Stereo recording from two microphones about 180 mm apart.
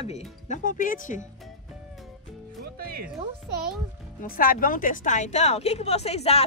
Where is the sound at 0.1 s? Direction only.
40° left (ahead or behind).